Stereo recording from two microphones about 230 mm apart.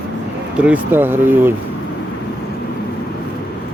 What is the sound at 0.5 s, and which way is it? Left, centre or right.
Speech, centre.